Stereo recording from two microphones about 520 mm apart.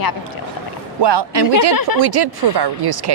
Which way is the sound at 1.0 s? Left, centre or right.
Right.